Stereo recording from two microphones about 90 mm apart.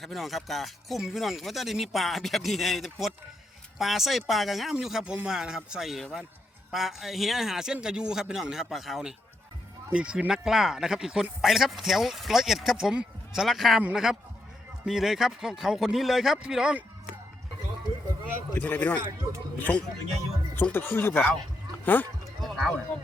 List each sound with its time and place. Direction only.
0.0 s speech: centre (ahead or behind)
18.5 s speech: 20° left (ahead or behind)
22.4 s music: centre (ahead or behind)